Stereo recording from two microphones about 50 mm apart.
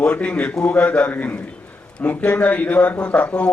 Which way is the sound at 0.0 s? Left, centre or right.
Left.